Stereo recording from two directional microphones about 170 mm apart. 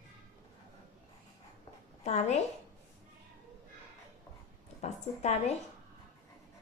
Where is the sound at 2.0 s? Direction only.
40° left (ahead or behind).